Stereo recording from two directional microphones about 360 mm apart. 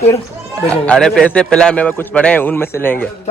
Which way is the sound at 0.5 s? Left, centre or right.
Centre.